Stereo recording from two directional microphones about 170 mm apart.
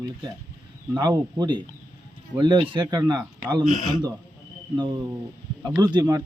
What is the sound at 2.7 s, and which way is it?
Speech, 25° right (ahead or behind).